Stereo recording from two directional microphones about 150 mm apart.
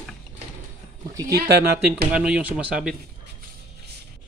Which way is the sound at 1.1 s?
20° right (ahead or behind).